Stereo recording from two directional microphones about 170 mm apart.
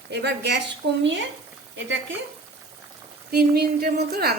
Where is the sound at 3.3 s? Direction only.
65° right (ahead or behind).